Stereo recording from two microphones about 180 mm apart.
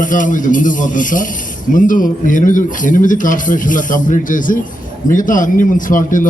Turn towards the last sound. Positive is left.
turn(degrees=45)  # may be behind; listen again after turning